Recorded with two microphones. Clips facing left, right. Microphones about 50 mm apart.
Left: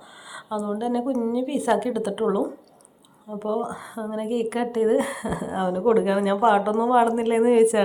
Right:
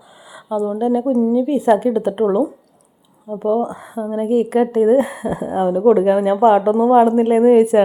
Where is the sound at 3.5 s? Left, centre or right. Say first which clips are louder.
Right 8 dB; right.